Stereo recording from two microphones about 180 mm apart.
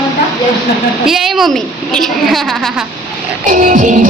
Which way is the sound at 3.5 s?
45° right (ahead or behind).